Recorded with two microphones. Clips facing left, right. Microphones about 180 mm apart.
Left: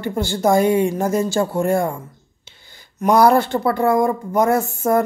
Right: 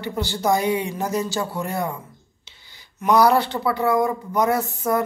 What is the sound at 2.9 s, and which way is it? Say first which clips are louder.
Speech: left 3 dB; 50° left (ahead or behind).